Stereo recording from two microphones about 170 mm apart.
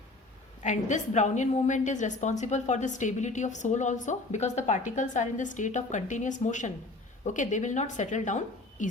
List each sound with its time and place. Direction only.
0.6 s a woman's voice: 45° left (ahead or behind)